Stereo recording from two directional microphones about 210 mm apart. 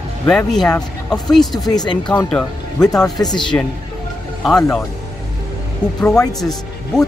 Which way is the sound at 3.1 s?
20° left (ahead or behind).